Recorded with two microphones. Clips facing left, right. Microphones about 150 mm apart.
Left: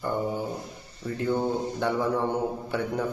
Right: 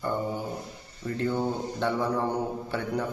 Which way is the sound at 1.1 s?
15° left (ahead or behind).